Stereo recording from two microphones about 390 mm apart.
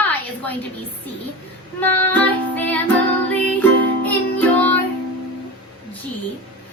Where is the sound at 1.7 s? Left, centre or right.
Centre.